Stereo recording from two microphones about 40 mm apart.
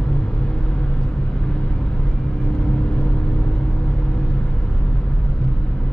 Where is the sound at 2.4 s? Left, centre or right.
Left.